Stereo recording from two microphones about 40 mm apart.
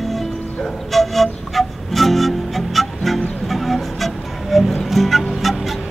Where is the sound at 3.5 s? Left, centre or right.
Centre.